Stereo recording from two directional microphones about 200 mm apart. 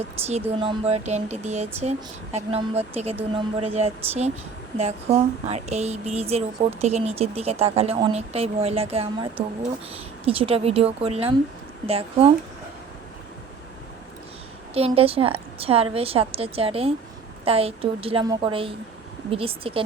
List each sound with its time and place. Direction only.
0.6 s a woman's voice: 25° right (ahead or behind)
14.7 s a woman's voice: 30° right (ahead or behind)